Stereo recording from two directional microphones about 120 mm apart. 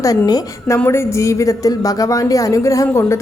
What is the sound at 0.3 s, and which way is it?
A woman's voice, 30° left (ahead or behind).